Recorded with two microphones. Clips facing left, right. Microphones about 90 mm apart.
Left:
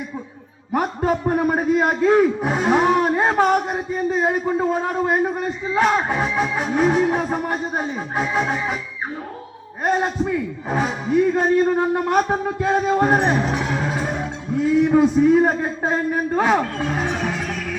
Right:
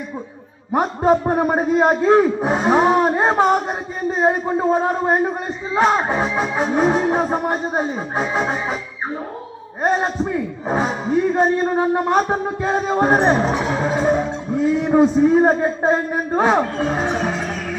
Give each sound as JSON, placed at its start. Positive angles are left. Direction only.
{"t": 0.7, "sound": "a man's voice", "side_deg": -25}
{"t": 9.8, "sound": "a man's voice", "side_deg": -30}